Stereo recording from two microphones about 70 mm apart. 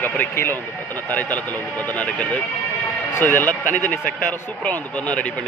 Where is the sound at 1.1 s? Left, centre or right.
Left.